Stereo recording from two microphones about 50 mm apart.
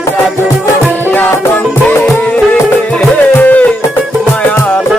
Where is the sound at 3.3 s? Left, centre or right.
Left.